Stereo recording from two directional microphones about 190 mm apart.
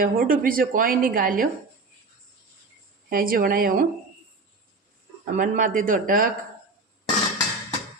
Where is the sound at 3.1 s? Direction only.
50° right (ahead or behind).